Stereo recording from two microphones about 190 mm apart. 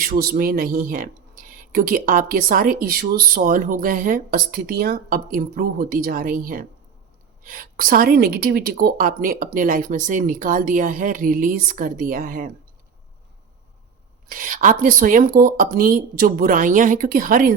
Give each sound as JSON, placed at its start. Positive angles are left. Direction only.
{"t": 0.0, "sound": "speech", "side_deg": -50}
{"t": 14.3, "sound": "speech", "side_deg": -45}